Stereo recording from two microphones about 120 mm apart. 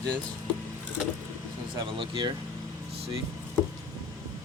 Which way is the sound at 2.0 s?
40° right (ahead or behind).